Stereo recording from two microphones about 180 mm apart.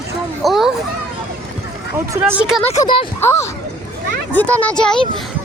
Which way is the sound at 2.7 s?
25° left (ahead or behind).